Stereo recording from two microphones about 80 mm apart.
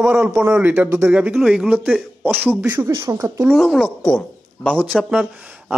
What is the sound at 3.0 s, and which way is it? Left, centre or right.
Speech, right.